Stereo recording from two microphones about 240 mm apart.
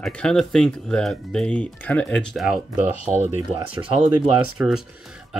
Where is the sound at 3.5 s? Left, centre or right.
Right.